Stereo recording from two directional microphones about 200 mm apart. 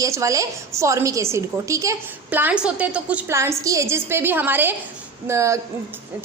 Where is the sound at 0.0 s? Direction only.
15° right (ahead or behind).